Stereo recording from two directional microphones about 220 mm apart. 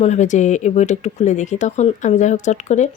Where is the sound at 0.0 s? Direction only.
30° left (ahead or behind).